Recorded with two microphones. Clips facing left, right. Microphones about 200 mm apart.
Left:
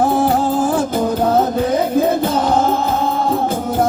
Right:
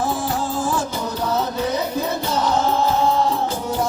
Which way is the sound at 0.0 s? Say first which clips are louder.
Left 8 dB; 55° left (ahead or behind).